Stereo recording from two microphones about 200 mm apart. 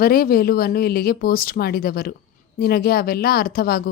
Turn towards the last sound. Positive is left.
turn(degrees=50)  # may be behind; listen again after turning